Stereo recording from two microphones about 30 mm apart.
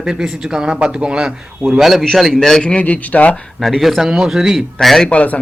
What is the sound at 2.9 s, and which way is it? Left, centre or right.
Speech, left.